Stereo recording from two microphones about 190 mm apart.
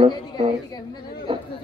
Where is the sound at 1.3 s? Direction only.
25° right (ahead or behind).